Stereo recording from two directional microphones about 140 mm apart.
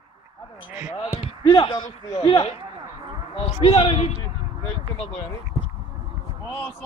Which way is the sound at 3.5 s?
45° left (ahead or behind).